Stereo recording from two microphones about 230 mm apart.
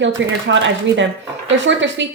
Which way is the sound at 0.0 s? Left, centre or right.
Right.